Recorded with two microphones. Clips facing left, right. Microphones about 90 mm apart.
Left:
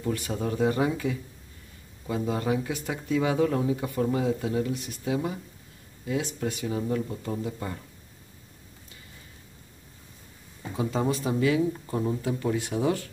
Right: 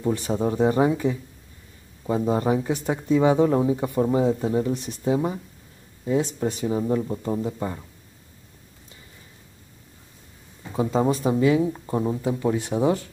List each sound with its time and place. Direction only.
0.0 s speech: 30° right (ahead or behind)
10.8 s speech: 30° right (ahead or behind)